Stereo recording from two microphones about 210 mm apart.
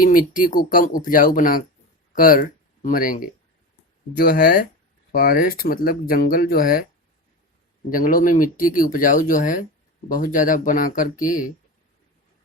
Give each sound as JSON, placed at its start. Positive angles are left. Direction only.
{"t": 0.0, "sound": "speech", "side_deg": 40}
{"t": 7.9, "sound": "speech", "side_deg": 40}